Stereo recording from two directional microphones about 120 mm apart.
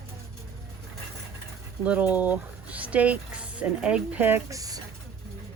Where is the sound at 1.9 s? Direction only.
15° right (ahead or behind).